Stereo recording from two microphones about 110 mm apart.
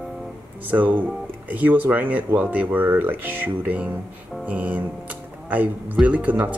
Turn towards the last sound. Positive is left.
turn(degrees=-15)  # may be behind; listen again after turning